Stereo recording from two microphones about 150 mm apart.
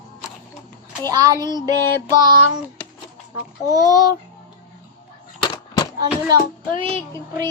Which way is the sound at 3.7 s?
25° right (ahead or behind).